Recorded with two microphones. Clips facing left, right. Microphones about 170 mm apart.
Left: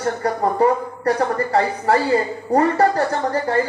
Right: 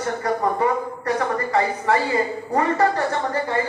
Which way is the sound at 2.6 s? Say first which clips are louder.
Left 3 dB; 35° left (ahead or behind).